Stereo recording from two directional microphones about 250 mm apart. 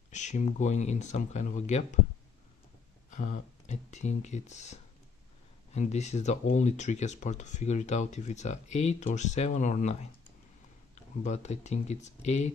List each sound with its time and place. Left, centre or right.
0.1 s speech: left
3.1 s speech: left
11.2 s speech: left